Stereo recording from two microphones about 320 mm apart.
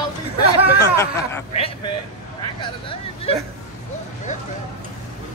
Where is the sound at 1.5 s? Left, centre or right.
Centre.